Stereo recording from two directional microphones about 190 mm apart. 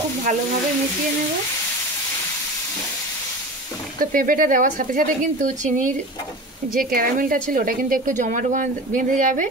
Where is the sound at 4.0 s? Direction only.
45° right (ahead or behind).